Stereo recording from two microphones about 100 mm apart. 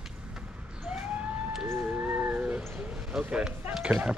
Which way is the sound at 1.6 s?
20° right (ahead or behind).